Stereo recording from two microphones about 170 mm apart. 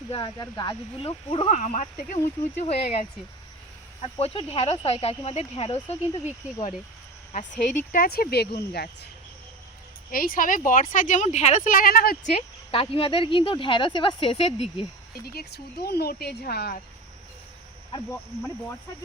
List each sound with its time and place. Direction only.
0.1 s speech: 25° left (ahead or behind)
6.2 s speech: 40° left (ahead or behind)
7.9 s speech: 65° left (ahead or behind)
10.1 s speech: 55° left (ahead or behind)
12.3 s speech: 35° left (ahead or behind)
15.2 s speech: 65° left (ahead or behind)